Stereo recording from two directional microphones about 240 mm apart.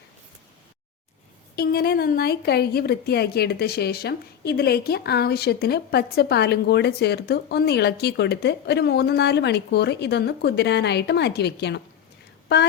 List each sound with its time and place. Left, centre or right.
1.5 s a woman's voice: left